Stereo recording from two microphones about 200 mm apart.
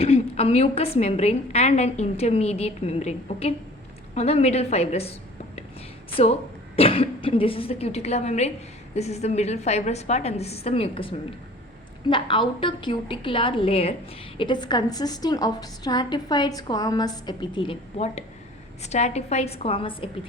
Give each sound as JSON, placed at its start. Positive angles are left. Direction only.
{"t": 0.0, "sound": "a woman's voice", "side_deg": 30}
{"t": 6.7, "sound": "a woman's voice", "side_deg": 30}